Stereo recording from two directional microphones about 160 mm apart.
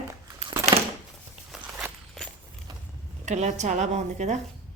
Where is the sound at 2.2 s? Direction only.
Centre (ahead or behind).